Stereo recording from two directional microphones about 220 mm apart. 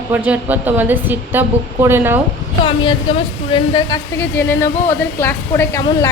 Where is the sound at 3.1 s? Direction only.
25° left (ahead or behind).